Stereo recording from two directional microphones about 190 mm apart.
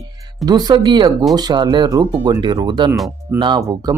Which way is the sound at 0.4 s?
20° right (ahead or behind).